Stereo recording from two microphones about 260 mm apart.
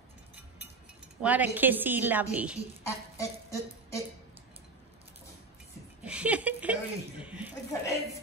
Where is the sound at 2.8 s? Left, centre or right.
Centre.